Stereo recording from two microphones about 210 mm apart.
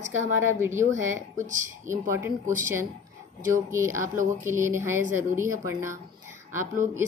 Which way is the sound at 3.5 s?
15° right (ahead or behind).